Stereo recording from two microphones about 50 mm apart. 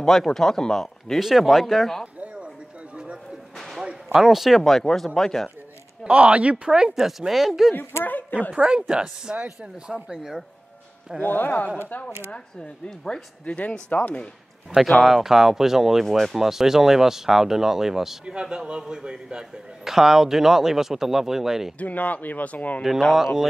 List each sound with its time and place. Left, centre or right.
0.0 s speech: centre
1.2 s speech: centre
3.5 s a sound: centre
3.8 s speech: centre
6.0 s speech: right
7.1 s speech: centre
8.0 s a sound: left
8.5 s a man's voice: centre
11.2 s speech: left
12.8 s speech: centre
13.6 s speech: left
15.0 s a man's voice: centre
21.7 s speech: left
23.1 s speech: centre